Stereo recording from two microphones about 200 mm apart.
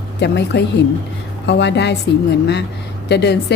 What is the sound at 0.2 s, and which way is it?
Speech, 60° left (ahead or behind).